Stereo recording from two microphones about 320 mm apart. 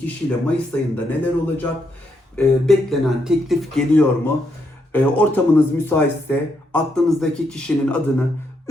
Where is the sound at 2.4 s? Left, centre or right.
Centre.